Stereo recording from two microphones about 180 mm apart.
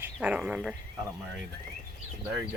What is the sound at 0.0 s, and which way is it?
Speech, 10° right (ahead or behind).